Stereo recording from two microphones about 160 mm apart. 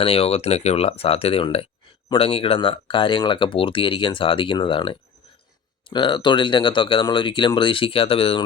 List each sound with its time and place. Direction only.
0.0 s speech: 35° left (ahead or behind)